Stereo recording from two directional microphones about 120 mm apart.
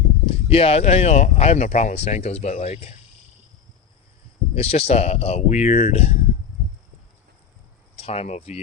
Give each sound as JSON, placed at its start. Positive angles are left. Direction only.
{"t": 0.3, "sound": "speech", "side_deg": 55}
{"t": 4.5, "sound": "speech", "side_deg": 60}
{"t": 7.9, "sound": "speech", "side_deg": 60}